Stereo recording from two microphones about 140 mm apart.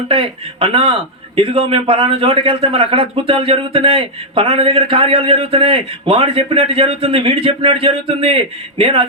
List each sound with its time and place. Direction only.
0.1 s a man's voice: 40° right (ahead or behind)